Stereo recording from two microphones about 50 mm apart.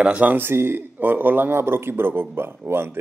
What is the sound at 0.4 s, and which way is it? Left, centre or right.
A man's voice, right.